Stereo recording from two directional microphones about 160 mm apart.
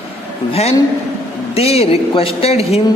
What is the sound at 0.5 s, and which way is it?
A man's voice, 40° left (ahead or behind).